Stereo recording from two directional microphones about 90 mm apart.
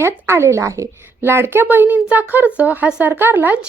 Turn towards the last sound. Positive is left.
turn(degrees=-20)  # may be behind; listen again after turning